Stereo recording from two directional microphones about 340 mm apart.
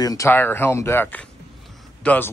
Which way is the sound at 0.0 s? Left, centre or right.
Centre.